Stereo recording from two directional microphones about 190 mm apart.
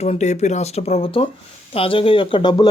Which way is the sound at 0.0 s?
35° left (ahead or behind).